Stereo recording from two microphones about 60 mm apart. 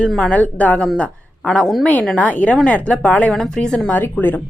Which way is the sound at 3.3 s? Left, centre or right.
Centre.